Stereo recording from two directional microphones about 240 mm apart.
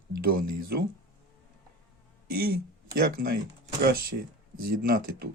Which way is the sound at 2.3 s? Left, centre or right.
Right.